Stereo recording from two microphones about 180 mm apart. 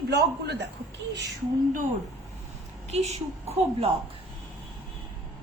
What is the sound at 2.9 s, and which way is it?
A woman's voice, 35° right (ahead or behind).